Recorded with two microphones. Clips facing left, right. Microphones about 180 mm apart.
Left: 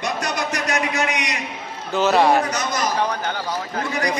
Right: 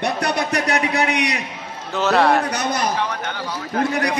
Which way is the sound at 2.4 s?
60° right (ahead or behind).